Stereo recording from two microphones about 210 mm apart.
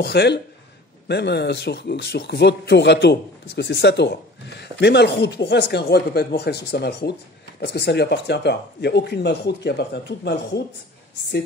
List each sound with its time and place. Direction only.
0.0 s speech: 55° left (ahead or behind)